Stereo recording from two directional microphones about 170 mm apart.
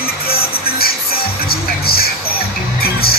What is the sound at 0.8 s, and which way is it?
Music, 65° left (ahead or behind).